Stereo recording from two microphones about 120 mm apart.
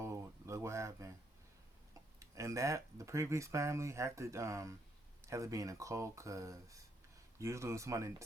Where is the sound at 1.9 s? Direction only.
25° right (ahead or behind).